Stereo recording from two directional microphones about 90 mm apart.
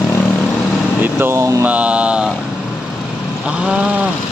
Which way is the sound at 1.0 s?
25° right (ahead or behind).